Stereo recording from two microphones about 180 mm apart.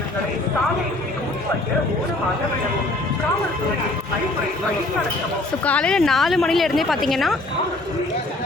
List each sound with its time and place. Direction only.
5.6 s a woman's voice: 5° left (ahead or behind)